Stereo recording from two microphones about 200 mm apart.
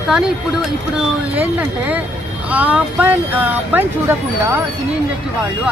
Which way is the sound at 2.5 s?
10° right (ahead or behind).